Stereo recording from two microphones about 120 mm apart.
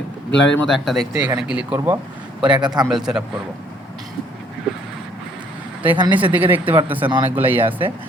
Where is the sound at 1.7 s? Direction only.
25° right (ahead or behind).